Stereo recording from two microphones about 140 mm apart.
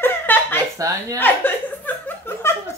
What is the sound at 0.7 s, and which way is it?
Speech, 25° right (ahead or behind).